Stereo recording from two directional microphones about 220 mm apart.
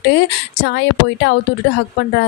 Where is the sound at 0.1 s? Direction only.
50° left (ahead or behind).